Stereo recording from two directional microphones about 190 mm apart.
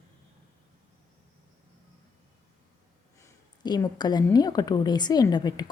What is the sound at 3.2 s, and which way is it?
A woman's voice, 20° left (ahead or behind).